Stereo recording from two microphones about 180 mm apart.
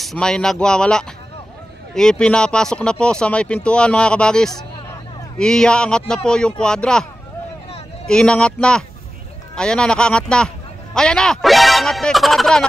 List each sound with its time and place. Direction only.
0.0 s speech: 5° left (ahead or behind)
8.1 s speech: 5° left (ahead or behind)